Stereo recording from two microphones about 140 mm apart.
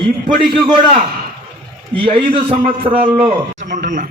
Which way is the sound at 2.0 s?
40° right (ahead or behind).